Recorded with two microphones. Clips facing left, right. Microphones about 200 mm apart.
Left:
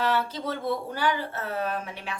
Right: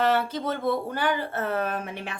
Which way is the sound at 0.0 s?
55° right (ahead or behind).